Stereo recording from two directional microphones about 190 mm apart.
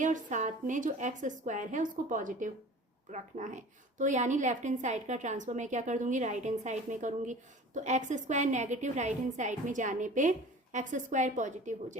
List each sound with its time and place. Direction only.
0.0 s a child's voice: 40° right (ahead or behind)